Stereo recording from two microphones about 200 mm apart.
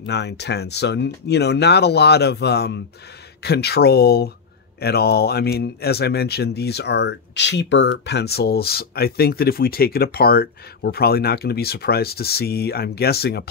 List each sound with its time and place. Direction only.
0.0 s speech: 60° left (ahead or behind)